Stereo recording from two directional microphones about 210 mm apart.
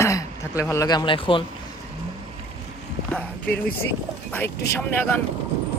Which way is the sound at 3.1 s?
10° left (ahead or behind).